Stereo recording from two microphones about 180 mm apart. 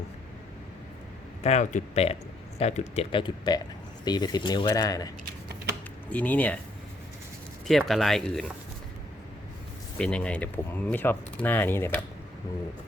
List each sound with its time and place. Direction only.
1.5 s speech: 35° left (ahead or behind); by 5.0 s 20° left (ahead or behind)
6.1 s speech: 10° left (ahead or behind)
7.7 s speech: centre (ahead or behind)
10.0 s speech: 5° left (ahead or behind)